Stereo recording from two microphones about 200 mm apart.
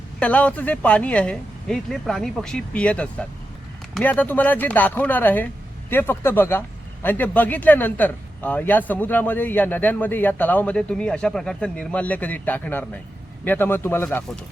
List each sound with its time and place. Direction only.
0.2 s speech: 5° left (ahead or behind)